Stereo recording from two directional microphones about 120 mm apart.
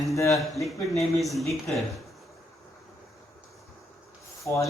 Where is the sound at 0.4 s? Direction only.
Centre (ahead or behind).